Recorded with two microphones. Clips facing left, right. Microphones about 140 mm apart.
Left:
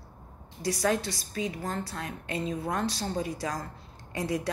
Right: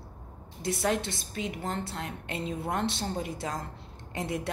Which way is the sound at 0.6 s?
25° right (ahead or behind).